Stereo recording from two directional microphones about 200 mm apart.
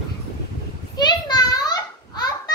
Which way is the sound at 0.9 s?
20° left (ahead or behind).